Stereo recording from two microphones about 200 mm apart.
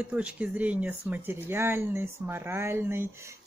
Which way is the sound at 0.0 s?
5° right (ahead or behind).